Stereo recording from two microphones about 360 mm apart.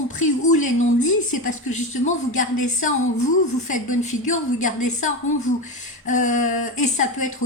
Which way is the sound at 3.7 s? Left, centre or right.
Left.